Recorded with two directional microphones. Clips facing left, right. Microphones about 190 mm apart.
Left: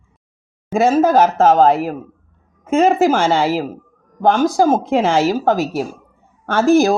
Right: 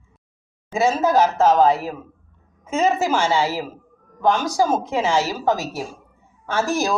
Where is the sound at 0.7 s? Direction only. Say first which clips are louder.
Left 5 dB; 50° left (ahead or behind).